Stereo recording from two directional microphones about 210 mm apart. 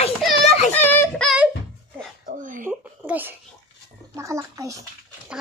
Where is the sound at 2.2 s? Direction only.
40° right (ahead or behind).